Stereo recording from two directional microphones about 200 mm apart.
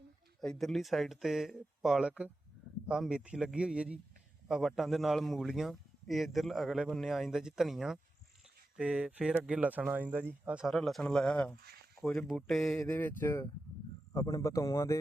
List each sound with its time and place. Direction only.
0.4 s a man's voice: centre (ahead or behind)